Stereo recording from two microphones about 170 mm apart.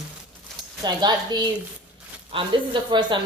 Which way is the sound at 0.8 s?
25° right (ahead or behind).